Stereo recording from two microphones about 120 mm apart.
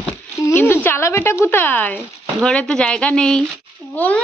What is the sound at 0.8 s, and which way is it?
A woman's voice, 20° left (ahead or behind).